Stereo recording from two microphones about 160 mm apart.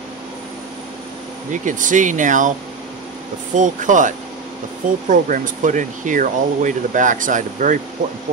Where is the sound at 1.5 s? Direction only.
55° right (ahead or behind).